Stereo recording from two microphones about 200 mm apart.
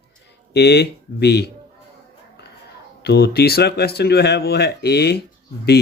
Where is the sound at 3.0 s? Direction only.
50° left (ahead or behind).